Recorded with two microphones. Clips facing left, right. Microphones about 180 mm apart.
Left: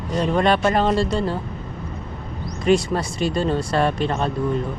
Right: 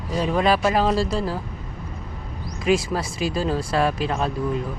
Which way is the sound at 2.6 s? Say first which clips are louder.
Left 3 dB; centre (ahead or behind).